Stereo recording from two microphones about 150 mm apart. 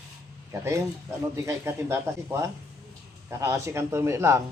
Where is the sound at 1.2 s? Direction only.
20° right (ahead or behind).